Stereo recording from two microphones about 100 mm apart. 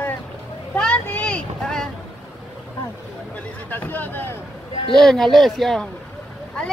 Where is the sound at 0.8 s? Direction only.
10° left (ahead or behind).